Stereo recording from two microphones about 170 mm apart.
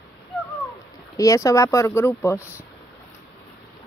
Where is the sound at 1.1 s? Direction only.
20° left (ahead or behind).